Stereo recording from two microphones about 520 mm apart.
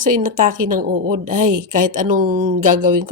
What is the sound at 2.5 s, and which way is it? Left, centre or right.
Speech, right.